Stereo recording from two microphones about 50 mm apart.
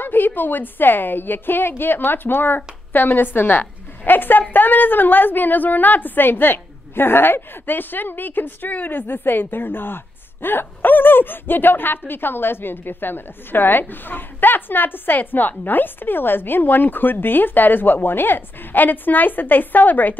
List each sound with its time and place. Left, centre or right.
0.0 s a woman's voice: left